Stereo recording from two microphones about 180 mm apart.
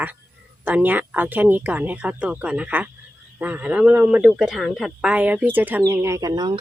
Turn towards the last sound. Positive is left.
turn(degrees=-25)  # may be behind; listen again after turning